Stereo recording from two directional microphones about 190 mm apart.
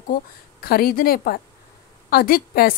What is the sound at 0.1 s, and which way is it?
Speech, 50° left (ahead or behind).